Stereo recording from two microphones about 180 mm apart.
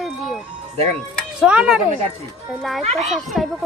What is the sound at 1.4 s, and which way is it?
Speech, 5° right (ahead or behind).